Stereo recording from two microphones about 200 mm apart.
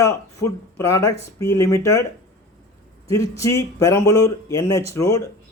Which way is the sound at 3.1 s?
15° left (ahead or behind).